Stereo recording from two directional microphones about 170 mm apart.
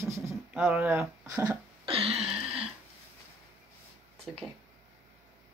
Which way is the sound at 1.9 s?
35° right (ahead or behind).